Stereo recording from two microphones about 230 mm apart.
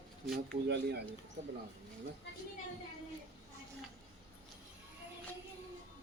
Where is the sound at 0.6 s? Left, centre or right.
Right.